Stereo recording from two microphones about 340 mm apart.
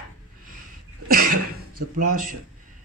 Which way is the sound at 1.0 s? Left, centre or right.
Right.